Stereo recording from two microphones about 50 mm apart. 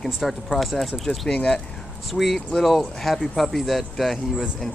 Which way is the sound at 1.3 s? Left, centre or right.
Centre.